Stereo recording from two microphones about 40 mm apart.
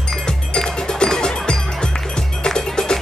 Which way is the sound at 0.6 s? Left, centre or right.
Centre.